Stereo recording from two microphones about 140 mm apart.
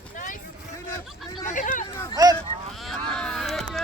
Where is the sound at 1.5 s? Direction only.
70° left (ahead or behind).